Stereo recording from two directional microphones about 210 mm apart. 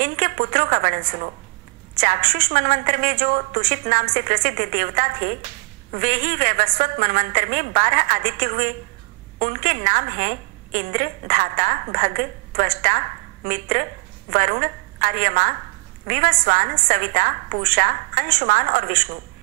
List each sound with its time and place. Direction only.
0.0 s a woman's voice: 40° right (ahead or behind)
2.0 s a woman's voice: 40° right (ahead or behind)
13.5 s a woman's voice: 40° right (ahead or behind)